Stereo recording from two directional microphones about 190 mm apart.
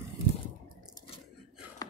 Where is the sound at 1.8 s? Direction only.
20° left (ahead or behind).